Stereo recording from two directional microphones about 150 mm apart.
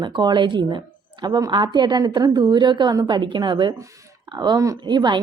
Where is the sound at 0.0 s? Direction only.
30° right (ahead or behind).